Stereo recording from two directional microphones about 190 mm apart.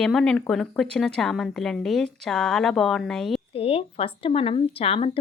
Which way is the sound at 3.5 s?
30° left (ahead or behind).